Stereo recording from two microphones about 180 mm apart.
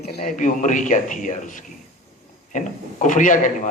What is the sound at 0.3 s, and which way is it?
A man's voice, 45° left (ahead or behind).